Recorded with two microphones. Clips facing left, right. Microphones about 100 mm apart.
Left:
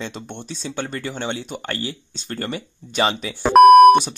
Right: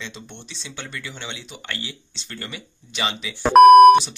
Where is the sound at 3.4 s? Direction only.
Centre (ahead or behind).